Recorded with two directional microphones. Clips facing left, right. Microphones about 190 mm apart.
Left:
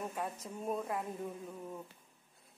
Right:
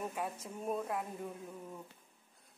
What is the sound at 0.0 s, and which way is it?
Speech, centre (ahead or behind).